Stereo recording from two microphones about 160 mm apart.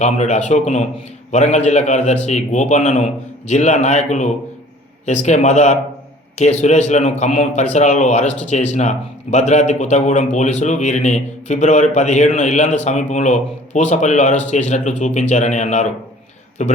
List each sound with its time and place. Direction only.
0.0 s speech: 45° left (ahead or behind)